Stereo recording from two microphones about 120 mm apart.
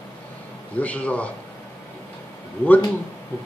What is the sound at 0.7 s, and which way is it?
Speech, 10° left (ahead or behind).